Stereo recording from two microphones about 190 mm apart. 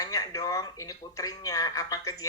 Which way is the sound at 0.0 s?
20° left (ahead or behind).